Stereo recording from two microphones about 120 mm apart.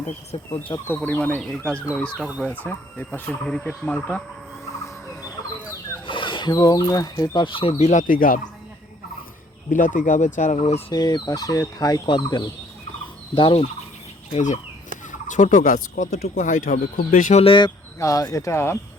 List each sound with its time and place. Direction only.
0.9 s speech: 15° left (ahead or behind)
2.1 s speech: 10° right (ahead or behind)
2.4 s speech: 15° left (ahead or behind)
6.1 s speech: 45° left (ahead or behind)
9.7 s speech: 90° left; by 10.9 s 60° left (ahead or behind)
10.9 s fowl: 35° left (ahead or behind)
14.3 s speech: 90° left
17.4 s fowl: 45° left (ahead or behind)
18.0 s speech: 30° left (ahead or behind)